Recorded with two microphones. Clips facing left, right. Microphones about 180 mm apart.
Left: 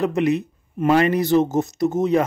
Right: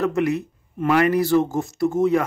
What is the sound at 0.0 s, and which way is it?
Speech, 20° left (ahead or behind).